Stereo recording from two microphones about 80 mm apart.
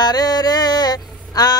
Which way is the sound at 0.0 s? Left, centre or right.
Left.